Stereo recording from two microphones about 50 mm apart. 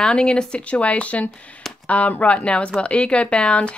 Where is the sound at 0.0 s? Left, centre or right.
Centre.